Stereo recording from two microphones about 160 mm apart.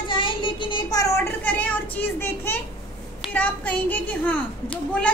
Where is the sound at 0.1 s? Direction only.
30° left (ahead or behind).